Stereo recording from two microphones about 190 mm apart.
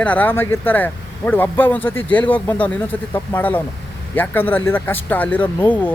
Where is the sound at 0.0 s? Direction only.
10° left (ahead or behind).